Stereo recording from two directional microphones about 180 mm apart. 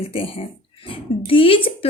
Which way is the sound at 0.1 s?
30° left (ahead or behind).